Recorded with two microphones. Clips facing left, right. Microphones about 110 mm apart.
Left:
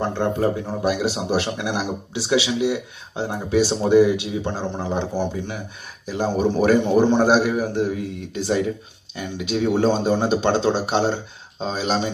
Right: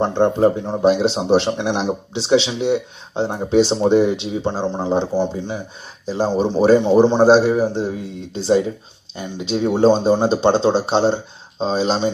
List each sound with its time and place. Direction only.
0.0 s speech: 20° right (ahead or behind)